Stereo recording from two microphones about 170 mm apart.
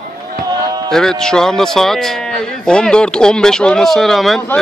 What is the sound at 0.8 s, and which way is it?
A man's voice, 5° left (ahead or behind).